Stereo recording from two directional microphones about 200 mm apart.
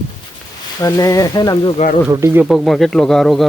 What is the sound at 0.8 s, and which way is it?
Speech, 15° left (ahead or behind).